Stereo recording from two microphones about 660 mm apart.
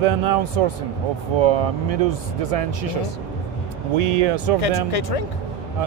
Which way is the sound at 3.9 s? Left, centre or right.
Right.